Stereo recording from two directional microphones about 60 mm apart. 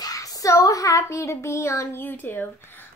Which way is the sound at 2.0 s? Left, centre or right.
Left.